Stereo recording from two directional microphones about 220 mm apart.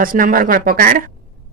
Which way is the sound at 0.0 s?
40° right (ahead or behind).